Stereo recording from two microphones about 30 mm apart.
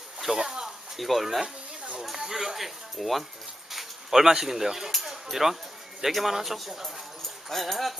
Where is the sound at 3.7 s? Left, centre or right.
Centre.